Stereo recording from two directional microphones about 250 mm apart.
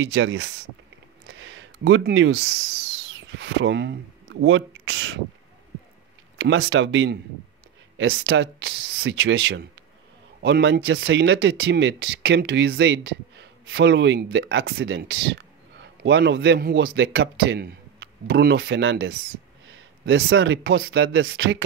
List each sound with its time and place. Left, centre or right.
0.0 s speech: right
1.3 s a sound: right
6.3 s speech: right